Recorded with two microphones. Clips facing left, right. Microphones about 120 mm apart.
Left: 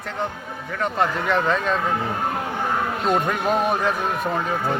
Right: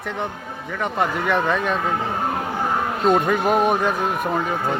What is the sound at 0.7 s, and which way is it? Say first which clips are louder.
Speech: even; 10° right (ahead or behind).